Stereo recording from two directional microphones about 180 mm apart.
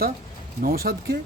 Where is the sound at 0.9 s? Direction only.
55° right (ahead or behind).